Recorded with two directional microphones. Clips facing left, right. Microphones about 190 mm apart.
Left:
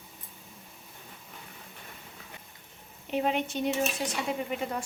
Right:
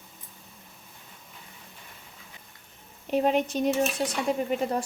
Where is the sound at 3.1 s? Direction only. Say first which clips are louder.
Right 5 dB; 40° right (ahead or behind).